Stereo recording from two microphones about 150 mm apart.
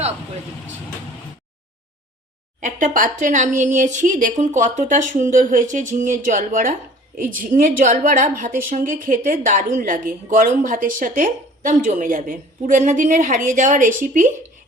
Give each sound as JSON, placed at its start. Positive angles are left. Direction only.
{"t": 2.6, "sound": "a woman's voice", "side_deg": -60}